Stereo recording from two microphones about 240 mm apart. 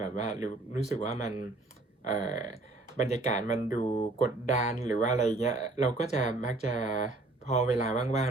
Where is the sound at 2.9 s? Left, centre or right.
Left.